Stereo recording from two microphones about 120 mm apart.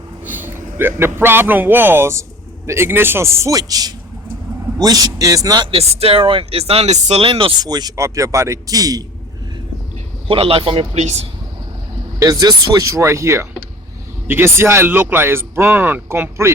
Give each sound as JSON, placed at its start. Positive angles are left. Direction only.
{"t": 0.3, "sound": "a man's voice", "side_deg": -15}
{"t": 5.7, "sound": "speech", "side_deg": -55}
{"t": 7.6, "sound": "a man's voice", "side_deg": -35}
{"t": 10.2, "sound": "speech", "side_deg": -50}
{"t": 10.9, "sound": "speech", "side_deg": -75}
{"t": 12.2, "sound": "speech", "side_deg": -30}